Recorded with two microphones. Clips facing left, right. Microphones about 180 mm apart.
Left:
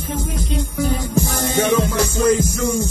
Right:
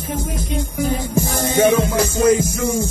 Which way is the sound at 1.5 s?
50° right (ahead or behind).